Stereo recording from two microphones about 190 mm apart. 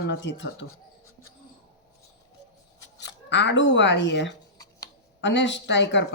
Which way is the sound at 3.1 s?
70° left (ahead or behind).